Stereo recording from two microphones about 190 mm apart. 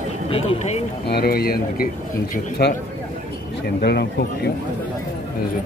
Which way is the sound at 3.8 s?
60° left (ahead or behind).